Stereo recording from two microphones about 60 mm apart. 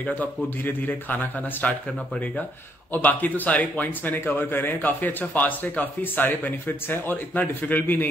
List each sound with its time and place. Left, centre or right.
0.0 s a man's voice: left